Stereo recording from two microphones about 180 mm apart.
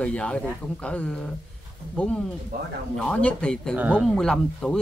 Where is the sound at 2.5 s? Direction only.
55° right (ahead or behind).